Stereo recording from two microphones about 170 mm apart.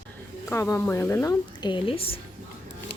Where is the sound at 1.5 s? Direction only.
30° left (ahead or behind).